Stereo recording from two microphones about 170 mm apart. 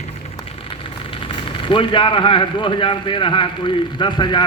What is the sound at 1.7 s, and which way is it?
A man's voice, 30° left (ahead or behind).